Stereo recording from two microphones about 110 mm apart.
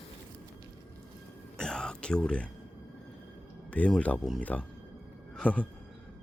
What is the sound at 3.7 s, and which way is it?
Speech, 10° left (ahead or behind).